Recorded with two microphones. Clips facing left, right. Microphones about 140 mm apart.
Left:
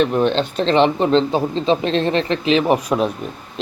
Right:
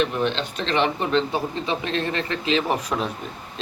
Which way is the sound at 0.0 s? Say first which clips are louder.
Left 7 dB; 40° left (ahead or behind).